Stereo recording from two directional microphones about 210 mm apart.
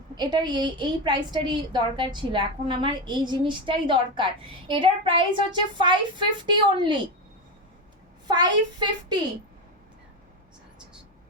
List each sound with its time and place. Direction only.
0.2 s a woman's voice: 20° right (ahead or behind)
8.3 s a woman's voice: 20° right (ahead or behind)